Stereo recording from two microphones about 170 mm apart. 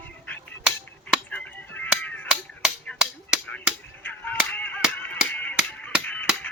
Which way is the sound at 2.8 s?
5° left (ahead or behind).